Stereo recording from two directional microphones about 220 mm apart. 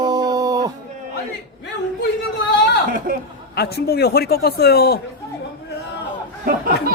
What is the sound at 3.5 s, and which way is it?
A man's voice, 45° left (ahead or behind).